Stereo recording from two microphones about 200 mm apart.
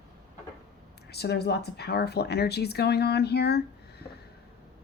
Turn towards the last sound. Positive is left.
turn(degrees=55)  # may be behind; listen again after turning